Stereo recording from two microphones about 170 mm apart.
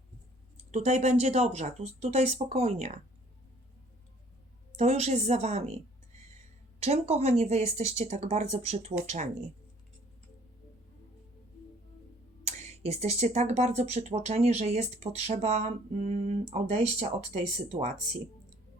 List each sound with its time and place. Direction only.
0.7 s speech: 40° right (ahead or behind)
4.8 s speech: 40° right (ahead or behind)
6.7 s speech: 35° right (ahead or behind)
12.5 s speech: 40° right (ahead or behind)